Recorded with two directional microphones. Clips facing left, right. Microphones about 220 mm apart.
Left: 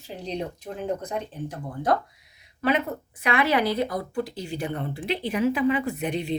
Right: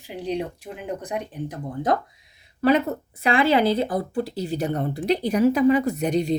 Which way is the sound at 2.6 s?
35° right (ahead or behind).